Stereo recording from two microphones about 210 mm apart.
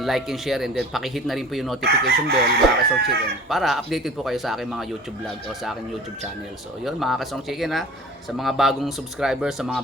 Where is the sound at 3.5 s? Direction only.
Centre (ahead or behind).